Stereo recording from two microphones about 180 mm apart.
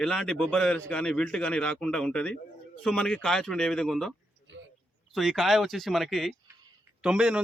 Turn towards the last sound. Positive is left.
turn(degrees=-5)  # may be behind; listen again after turning